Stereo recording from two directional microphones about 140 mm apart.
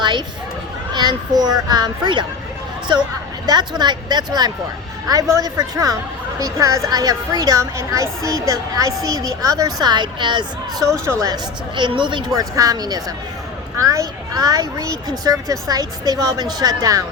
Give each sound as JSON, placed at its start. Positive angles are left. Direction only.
{"t": 0.0, "sound": "a sound", "side_deg": -30}
{"t": 0.9, "sound": "a child's voice", "side_deg": -30}
{"t": 10.8, "sound": "speech", "side_deg": 0}
{"t": 11.0, "sound": "speech", "side_deg": -20}
{"t": 11.8, "sound": "speech", "side_deg": -35}